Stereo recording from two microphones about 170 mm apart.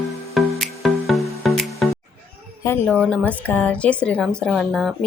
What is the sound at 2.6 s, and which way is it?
A woman's voice, 15° left (ahead or behind).